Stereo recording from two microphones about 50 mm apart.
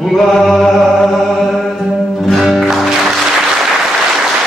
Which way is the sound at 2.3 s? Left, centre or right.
Centre.